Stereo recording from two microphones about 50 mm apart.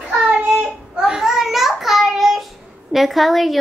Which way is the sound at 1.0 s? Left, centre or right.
Centre.